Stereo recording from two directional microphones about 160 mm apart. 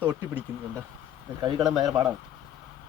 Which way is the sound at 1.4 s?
25° right (ahead or behind).